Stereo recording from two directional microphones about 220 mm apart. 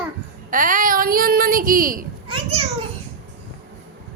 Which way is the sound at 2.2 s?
25° right (ahead or behind).